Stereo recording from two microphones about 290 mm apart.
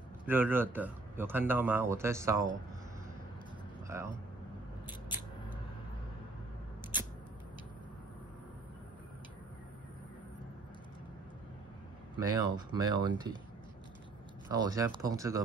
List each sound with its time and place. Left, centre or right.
0.3 s speech: centre
3.8 s speech: centre
12.2 s speech: centre
14.5 s speech: centre